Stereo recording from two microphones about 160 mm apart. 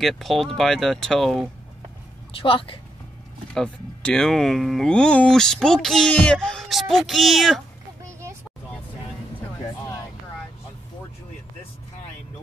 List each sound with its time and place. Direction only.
0.0 s speech: centre (ahead or behind)
2.4 s a woman's voice: 35° left (ahead or behind)
3.5 s speech: 5° left (ahead or behind)